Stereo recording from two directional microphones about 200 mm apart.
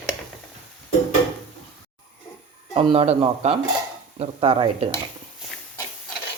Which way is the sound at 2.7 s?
30° right (ahead or behind).